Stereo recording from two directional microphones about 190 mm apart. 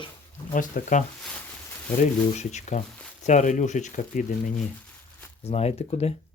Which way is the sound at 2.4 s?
35° left (ahead or behind).